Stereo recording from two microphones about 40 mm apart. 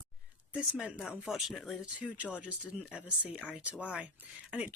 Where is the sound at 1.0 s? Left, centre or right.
Centre.